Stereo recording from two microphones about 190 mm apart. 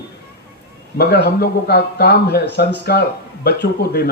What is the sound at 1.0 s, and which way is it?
Speech, 60° left (ahead or behind).